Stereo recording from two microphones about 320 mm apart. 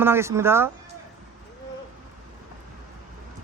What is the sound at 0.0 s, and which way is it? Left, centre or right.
Speech, centre.